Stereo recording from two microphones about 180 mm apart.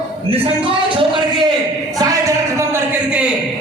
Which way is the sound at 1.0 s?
25° right (ahead or behind).